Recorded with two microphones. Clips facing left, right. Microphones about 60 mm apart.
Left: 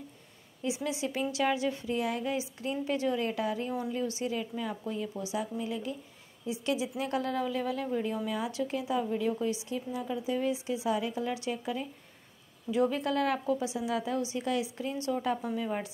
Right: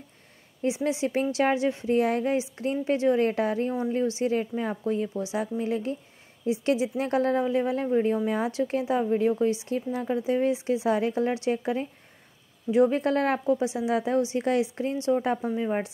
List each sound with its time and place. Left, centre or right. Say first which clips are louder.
0.6 s a woman's voice: right 7 dB; right
9.7 s a woman's voice: right 6 dB; right
13.0 s a woman's voice: right 5 dB; right
15.0 s speech: right 6 dB; right